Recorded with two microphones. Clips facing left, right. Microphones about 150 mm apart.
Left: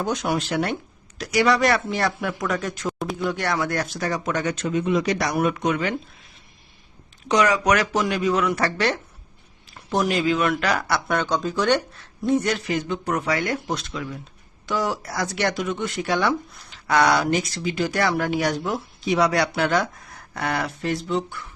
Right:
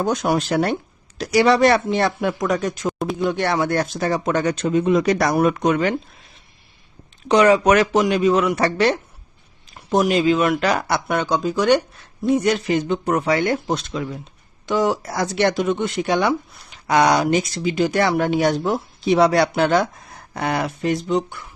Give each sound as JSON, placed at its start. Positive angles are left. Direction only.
{"t": 0.0, "sound": "speech", "side_deg": -45}
{"t": 5.1, "sound": "speech", "side_deg": -50}
{"t": 7.3, "sound": "speech", "side_deg": -30}